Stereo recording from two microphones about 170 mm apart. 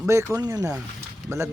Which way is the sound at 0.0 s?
15° right (ahead or behind).